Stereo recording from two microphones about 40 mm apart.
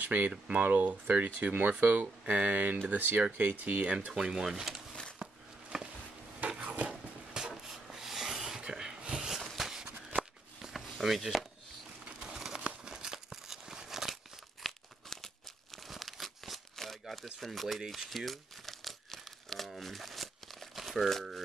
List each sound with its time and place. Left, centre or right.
0.0 s speech: right
3.5 s speech: right
4.1 s speech: centre
5.2 s a sound: centre
6.6 s a sound: right
6.9 s a sound: centre
9.8 s shuffling cards: right
10.6 s a sound: centre
12.5 s crumpling: right
14.6 s tearing: centre
15.9 s crumpling: centre
17.7 s speech: centre
18.1 s crumpling: centre
21.1 s speech: centre